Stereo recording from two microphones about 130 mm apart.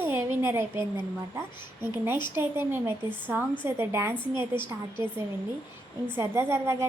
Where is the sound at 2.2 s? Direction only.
15° right (ahead or behind).